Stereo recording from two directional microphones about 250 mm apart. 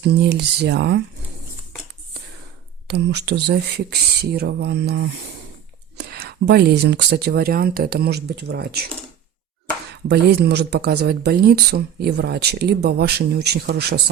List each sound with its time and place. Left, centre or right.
0.0 s speech: right
2.8 s speech: right
10.1 s speech: right